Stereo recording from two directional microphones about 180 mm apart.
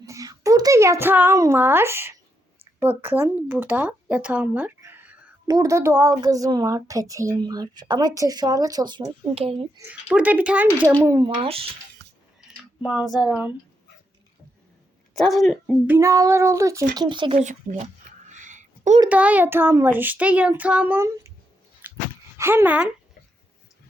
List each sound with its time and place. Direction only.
0.0 s a child's voice: 20° right (ahead or behind)
9.7 s a child's voice: 10° right (ahead or behind)
12.0 s a sound: 75° right (ahead or behind)
12.5 s speech: 5° right (ahead or behind)
15.1 s speech: centre (ahead or behind)
15.6 s a child's voice: 15° right (ahead or behind)
17.4 s speech: 45° right (ahead or behind)
18.3 s a sound: 40° right (ahead or behind)
19.0 s a child's voice: 10° right (ahead or behind)
21.8 s dog: 10° right (ahead or behind)
22.4 s a child's voice: 15° right (ahead or behind)